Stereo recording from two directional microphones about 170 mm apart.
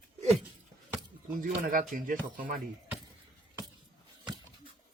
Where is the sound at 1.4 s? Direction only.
55° right (ahead or behind).